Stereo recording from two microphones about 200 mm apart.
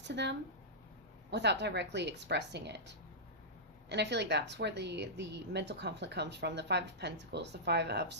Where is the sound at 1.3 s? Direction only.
60° right (ahead or behind).